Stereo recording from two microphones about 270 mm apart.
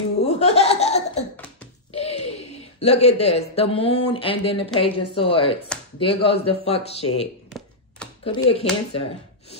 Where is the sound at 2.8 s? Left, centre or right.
Left.